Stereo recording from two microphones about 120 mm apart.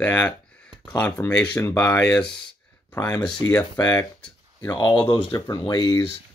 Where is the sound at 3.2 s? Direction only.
40° left (ahead or behind).